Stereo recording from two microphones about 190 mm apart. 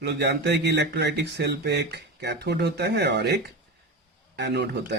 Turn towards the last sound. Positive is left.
turn(degrees=-65)  # may be behind; listen again after turning